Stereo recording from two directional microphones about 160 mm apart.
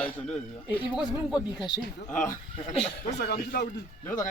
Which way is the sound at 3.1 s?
85° left.